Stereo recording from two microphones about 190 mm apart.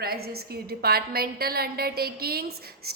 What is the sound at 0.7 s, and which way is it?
A woman's voice, 55° right (ahead or behind).